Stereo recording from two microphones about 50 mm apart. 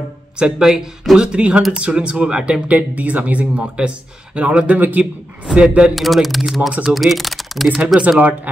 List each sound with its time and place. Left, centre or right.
0.4 s speech: centre
2.7 s speech: right
4.7 s a man's voice: right
5.7 s speech: right
5.9 s speech: centre